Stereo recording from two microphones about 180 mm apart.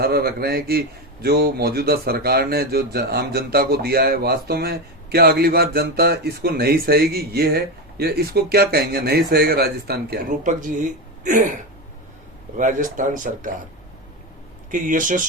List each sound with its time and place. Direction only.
0.0 s a man's voice: 60° right (ahead or behind)
10.4 s speech: 45° right (ahead or behind)
14.7 s speech: 45° right (ahead or behind)